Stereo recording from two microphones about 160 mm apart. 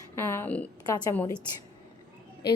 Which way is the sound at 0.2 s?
15° left (ahead or behind).